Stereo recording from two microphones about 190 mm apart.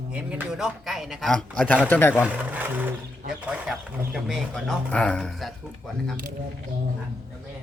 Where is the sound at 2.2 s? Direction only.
10° right (ahead or behind).